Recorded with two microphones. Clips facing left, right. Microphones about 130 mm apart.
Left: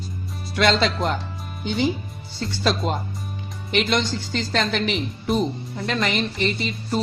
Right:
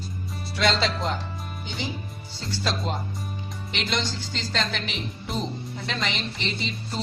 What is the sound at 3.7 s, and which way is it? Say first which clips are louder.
A woman's voice: left 7 dB; 55° left (ahead or behind).